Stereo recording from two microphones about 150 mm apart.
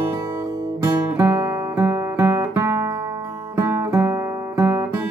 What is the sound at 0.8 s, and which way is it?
Music, 20° right (ahead or behind).